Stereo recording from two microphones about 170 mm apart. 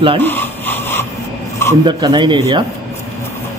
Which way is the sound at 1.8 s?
25° right (ahead or behind).